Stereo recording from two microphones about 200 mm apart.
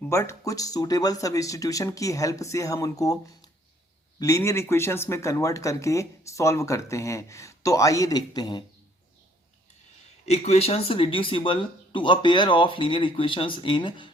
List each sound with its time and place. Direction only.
0.1 s speech: 15° left (ahead or behind)
4.2 s speech: 15° left (ahead or behind)
10.2 s speech: 35° left (ahead or behind)